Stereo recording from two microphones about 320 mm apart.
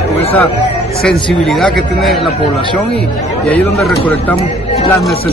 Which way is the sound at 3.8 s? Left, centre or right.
Centre.